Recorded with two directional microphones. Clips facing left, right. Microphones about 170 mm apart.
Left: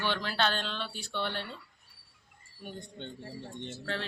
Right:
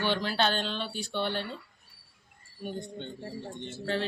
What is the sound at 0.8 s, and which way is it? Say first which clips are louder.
Speech: right 4 dB; centre (ahead or behind).